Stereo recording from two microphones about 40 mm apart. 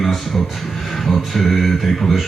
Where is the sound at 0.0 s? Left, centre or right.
Centre.